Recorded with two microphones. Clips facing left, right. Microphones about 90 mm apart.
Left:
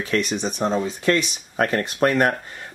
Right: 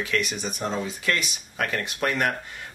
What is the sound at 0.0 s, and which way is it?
Speech, 35° left (ahead or behind).